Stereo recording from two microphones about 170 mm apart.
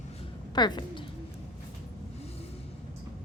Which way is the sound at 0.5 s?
25° left (ahead or behind).